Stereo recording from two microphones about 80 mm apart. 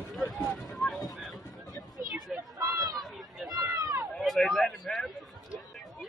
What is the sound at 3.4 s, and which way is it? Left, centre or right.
Run, right.